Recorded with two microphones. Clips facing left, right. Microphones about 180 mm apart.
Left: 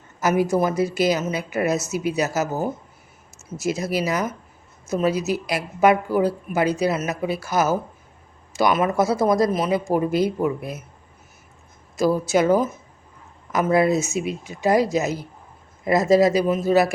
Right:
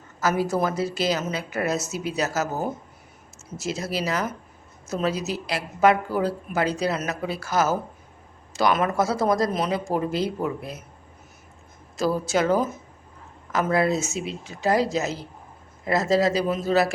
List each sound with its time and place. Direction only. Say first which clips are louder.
0.2 s a woman's voice: left 4 dB; 20° left (ahead or behind)
11.9 s a woman's voice: left 4 dB; 10° left (ahead or behind)